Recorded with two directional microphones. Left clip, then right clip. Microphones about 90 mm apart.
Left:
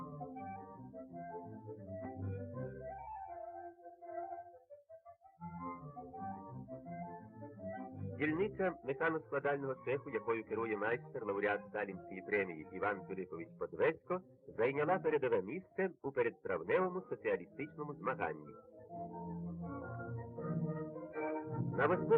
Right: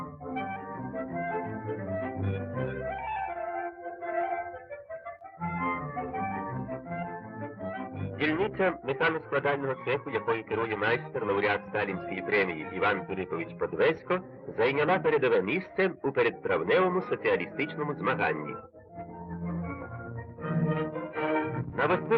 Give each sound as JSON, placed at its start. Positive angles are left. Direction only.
{"t": 0.3, "sound": "music", "side_deg": 40}
{"t": 12.9, "sound": "a man's voice", "side_deg": 40}
{"t": 20.7, "sound": "music", "side_deg": 35}